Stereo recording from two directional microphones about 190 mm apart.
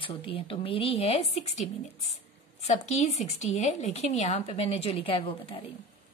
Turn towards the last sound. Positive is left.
turn(degrees=30)  # may be behind; listen again after turning